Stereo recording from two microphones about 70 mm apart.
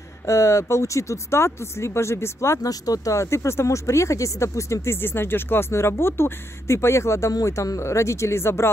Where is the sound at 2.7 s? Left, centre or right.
Left.